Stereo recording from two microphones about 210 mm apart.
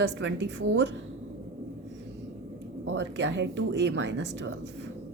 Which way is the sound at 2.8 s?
55° right (ahead or behind).